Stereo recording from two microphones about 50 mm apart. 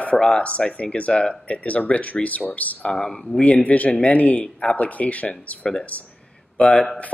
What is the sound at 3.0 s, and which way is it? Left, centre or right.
Speech, centre.